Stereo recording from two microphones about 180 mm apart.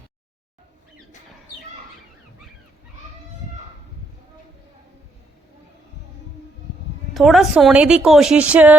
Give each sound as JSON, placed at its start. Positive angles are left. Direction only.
{"t": 7.1, "sound": "a woman's voice", "side_deg": 0}